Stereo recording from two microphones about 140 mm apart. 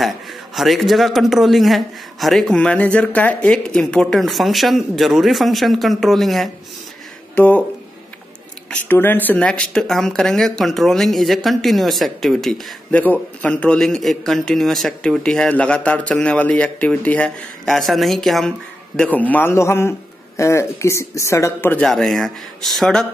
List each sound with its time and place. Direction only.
0.6 s a man's voice: centre (ahead or behind)
8.6 s a man's voice: 15° left (ahead or behind)
21.8 s a man's voice: centre (ahead or behind)